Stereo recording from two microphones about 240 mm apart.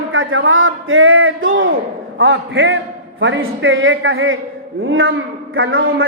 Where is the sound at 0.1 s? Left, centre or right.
Right.